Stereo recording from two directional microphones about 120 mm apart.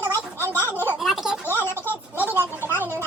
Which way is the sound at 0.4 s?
20° right (ahead or behind).